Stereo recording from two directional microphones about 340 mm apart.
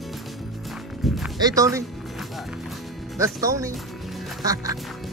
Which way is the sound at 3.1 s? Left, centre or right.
Centre.